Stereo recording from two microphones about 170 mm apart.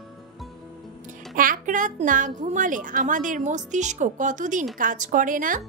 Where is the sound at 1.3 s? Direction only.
50° right (ahead or behind).